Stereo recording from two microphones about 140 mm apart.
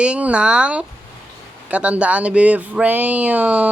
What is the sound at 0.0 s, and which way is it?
Speech, 10° right (ahead or behind).